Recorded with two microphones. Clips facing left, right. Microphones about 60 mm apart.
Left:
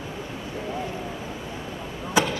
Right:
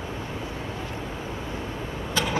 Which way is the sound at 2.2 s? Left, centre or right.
Centre.